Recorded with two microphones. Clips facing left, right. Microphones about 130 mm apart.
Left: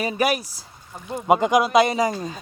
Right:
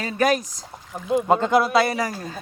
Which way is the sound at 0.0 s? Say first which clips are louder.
Right 1 dB; 10° left (ahead or behind).